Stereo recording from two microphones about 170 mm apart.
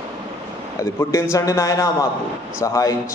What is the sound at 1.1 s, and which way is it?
A man's voice, 20° left (ahead or behind).